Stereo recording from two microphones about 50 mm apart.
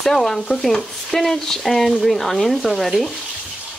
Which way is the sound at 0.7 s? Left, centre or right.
Centre.